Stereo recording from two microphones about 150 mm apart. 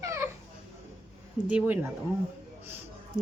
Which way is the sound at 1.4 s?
10° right (ahead or behind).